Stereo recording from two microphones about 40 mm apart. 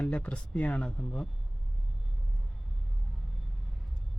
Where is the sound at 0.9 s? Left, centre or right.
Centre.